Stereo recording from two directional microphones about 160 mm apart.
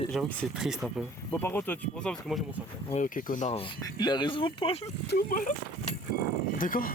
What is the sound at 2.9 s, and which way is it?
Speech, 55° left (ahead or behind).